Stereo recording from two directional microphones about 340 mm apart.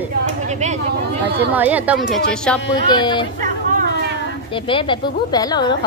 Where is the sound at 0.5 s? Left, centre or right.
Centre.